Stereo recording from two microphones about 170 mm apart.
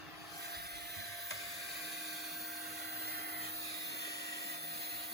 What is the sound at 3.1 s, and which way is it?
Vacuum cleaner, 65° right (ahead or behind).